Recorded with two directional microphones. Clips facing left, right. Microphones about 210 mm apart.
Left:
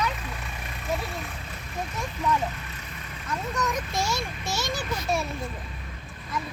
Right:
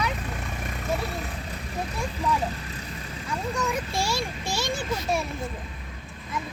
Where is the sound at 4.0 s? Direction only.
30° right (ahead or behind).